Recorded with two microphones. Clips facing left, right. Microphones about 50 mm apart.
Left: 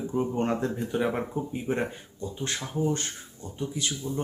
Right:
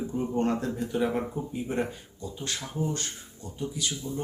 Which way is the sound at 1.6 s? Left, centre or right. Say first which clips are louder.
Even; left.